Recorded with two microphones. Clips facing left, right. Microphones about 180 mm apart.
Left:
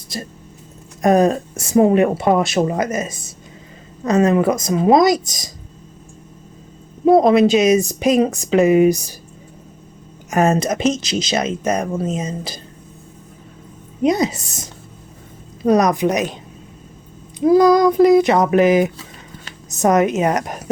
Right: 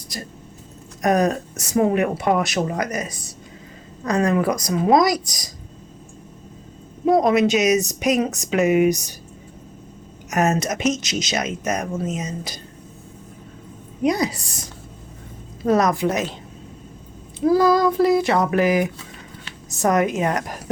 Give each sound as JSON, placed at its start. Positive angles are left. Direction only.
{"t": 0.1, "sound": "speech", "side_deg": 25}
{"t": 7.1, "sound": "speech", "side_deg": 30}
{"t": 10.2, "sound": "speech", "side_deg": 30}
{"t": 14.0, "sound": "a woman's voice", "side_deg": 20}
{"t": 17.4, "sound": "speech", "side_deg": 20}